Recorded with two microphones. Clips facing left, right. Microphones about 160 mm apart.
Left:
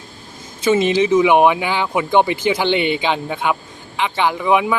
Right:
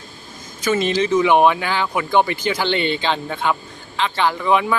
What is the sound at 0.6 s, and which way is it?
Speech, 20° left (ahead or behind).